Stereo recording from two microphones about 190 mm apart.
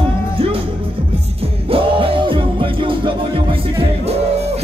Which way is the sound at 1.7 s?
30° right (ahead or behind).